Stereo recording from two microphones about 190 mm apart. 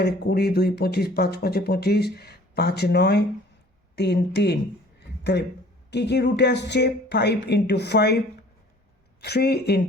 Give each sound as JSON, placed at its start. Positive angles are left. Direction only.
{"t": 0.0, "sound": "speech", "side_deg": 55}
{"t": 4.9, "sound": "a sound", "side_deg": 60}
{"t": 5.9, "sound": "speech", "side_deg": 65}
{"t": 9.2, "sound": "speech", "side_deg": 60}